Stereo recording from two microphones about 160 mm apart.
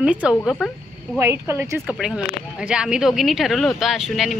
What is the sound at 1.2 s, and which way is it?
Speech, 15° right (ahead or behind).